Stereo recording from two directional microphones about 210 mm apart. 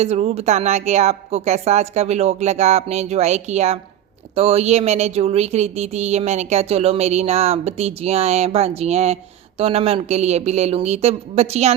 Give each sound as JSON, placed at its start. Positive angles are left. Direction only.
{"t": 0.0, "sound": "speech", "side_deg": -30}